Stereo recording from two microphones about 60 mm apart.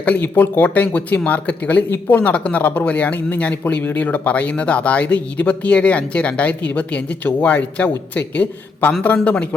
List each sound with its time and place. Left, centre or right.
0.2 s speech: left